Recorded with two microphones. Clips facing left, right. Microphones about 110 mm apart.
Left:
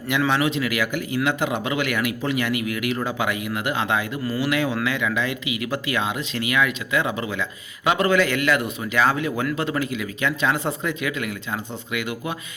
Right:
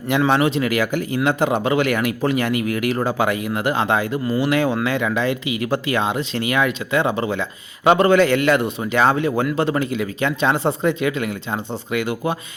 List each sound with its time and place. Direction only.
0.1 s speech: 35° right (ahead or behind)